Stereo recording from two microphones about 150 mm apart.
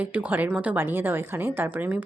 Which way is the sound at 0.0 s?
10° right (ahead or behind).